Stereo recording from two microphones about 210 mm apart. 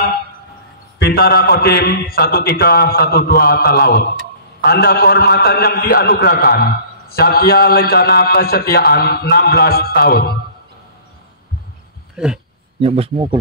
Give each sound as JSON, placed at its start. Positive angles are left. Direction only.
{"t": 0.9, "sound": "a man's voice", "side_deg": 50}
{"t": 12.8, "sound": "speech", "side_deg": -25}